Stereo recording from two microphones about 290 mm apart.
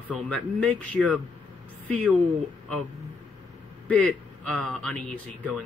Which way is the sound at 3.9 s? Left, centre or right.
Centre.